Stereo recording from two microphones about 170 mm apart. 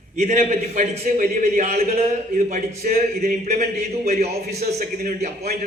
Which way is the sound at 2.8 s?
55° right (ahead or behind).